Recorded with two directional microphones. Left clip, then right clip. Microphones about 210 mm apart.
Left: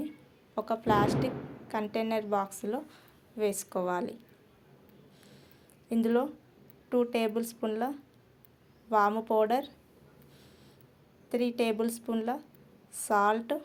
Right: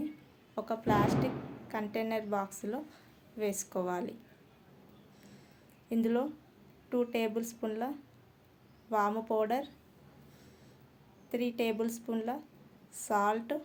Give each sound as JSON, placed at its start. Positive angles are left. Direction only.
{"t": 0.5, "sound": "a woman's voice", "side_deg": 5}
{"t": 5.9, "sound": "a woman's voice", "side_deg": 10}
{"t": 11.3, "sound": "a woman's voice", "side_deg": 10}